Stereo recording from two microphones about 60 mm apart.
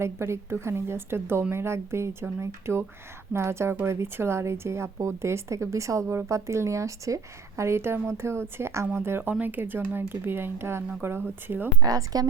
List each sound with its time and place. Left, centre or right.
0.0 s speech: right
11.8 s speech: right